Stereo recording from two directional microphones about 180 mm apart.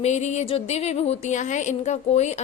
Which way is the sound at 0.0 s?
40° left (ahead or behind).